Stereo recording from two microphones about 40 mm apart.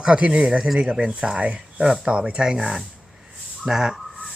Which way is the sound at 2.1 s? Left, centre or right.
Right.